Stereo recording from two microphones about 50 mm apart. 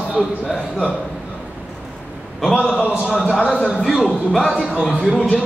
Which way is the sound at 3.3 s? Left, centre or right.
Left.